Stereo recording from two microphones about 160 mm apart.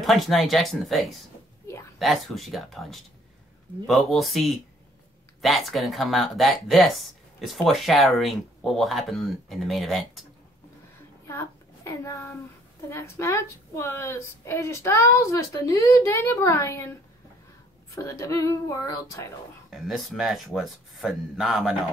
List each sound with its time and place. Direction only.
0.0 s speech: centre (ahead or behind)
11.2 s a child's voice: 15° left (ahead or behind)
17.9 s speech: 20° left (ahead or behind)
19.7 s speech: centre (ahead or behind)